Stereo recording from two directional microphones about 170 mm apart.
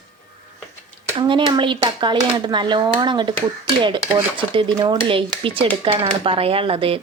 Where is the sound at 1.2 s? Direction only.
30° right (ahead or behind).